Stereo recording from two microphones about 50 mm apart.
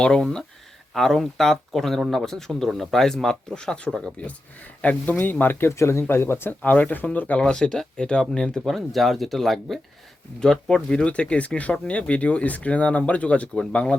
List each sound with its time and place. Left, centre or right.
0.0 s speech: centre
0.9 s speech: centre; by 5.6 s left
5.6 s speech: left
6.5 s speech: left
7.4 s speech: centre
8.6 s speech: centre
10.4 s speech: centre